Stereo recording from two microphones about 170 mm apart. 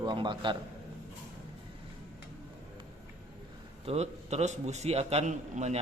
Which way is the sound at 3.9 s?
40° right (ahead or behind).